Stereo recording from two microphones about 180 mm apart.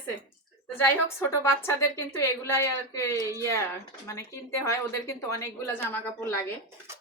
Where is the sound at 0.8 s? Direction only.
15° left (ahead or behind).